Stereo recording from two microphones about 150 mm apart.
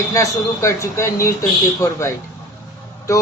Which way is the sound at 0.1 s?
20° left (ahead or behind).